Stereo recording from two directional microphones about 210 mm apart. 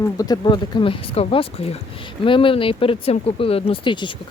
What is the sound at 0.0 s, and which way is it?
Speech, 15° left (ahead or behind).